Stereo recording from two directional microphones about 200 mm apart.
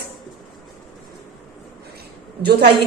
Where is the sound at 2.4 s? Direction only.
55° right (ahead or behind).